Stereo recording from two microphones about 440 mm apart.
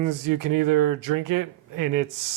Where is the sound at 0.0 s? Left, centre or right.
Right.